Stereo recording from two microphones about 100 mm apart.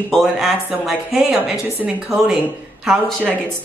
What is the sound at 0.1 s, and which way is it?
Speech, centre (ahead or behind).